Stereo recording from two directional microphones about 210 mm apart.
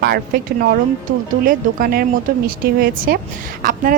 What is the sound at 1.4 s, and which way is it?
A woman's voice, 45° right (ahead or behind).